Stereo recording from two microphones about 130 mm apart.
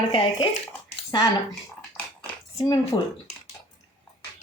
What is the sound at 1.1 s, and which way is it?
Speech, 30° left (ahead or behind).